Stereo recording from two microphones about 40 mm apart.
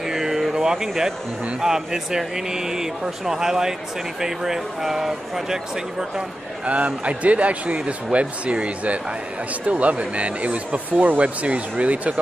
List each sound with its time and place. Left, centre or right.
0.0 s a sound: centre
1.6 s speech: centre
6.6 s speech: right